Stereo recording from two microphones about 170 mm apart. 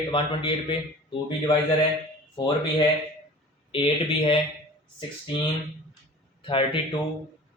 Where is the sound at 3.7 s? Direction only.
30° left (ahead or behind).